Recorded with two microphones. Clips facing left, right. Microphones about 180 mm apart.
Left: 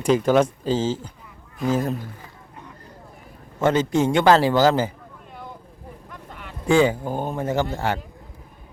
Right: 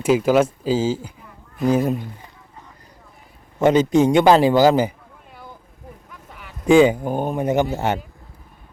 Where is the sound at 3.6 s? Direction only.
15° right (ahead or behind).